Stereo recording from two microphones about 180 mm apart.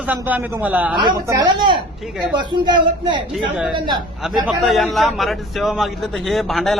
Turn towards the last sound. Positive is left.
turn(degrees=0)  # may be behind; listen again after turning